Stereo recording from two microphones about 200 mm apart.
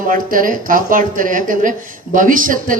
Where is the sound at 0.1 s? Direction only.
45° right (ahead or behind).